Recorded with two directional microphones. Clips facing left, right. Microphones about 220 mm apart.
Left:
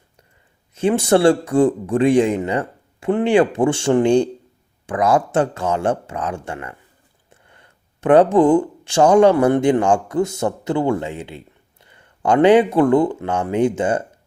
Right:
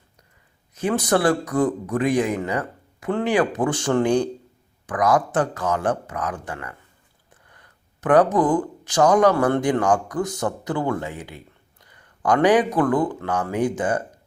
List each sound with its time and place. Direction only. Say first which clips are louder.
0.7 s a man's voice: left 5 dB; 25° left (ahead or behind)